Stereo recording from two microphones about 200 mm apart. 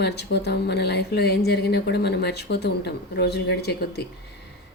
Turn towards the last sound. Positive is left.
turn(degrees=55)  # may be behind; listen again after turning